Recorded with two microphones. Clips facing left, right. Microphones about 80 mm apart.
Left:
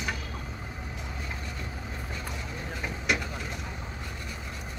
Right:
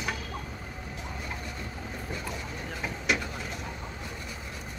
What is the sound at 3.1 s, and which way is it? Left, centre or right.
Vehicle, centre.